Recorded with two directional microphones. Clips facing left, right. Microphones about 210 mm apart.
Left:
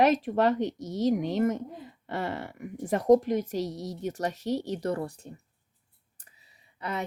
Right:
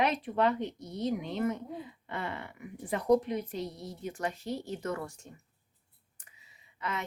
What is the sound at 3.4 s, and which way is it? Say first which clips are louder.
Speech: left 6 dB; 85° left.